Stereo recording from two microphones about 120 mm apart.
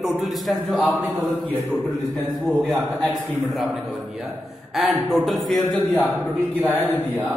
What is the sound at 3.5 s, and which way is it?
A woman's voice, centre (ahead or behind).